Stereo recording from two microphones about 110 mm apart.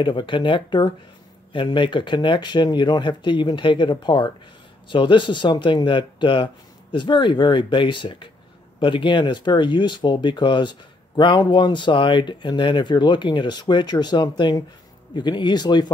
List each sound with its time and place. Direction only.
0.0 s speech: 45° left (ahead or behind)